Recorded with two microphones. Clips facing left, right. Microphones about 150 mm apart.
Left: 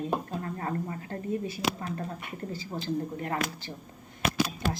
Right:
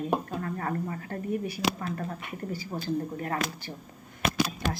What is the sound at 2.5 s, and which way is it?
Speech, 20° left (ahead or behind).